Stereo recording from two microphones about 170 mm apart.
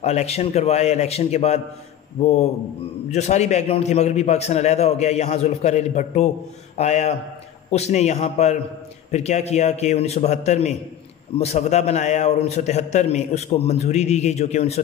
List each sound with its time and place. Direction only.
0.0 s a man's voice: 40° left (ahead or behind)